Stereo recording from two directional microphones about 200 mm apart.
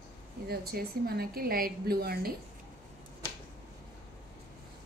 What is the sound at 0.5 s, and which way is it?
A woman's voice, 50° right (ahead or behind).